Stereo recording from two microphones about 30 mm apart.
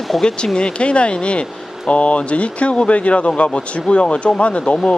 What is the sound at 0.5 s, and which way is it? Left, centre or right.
Speech, left.